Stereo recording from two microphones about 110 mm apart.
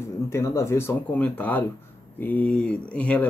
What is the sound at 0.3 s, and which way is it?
Speech, 25° left (ahead or behind).